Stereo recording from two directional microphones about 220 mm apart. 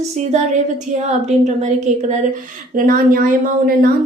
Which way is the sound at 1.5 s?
30° right (ahead or behind).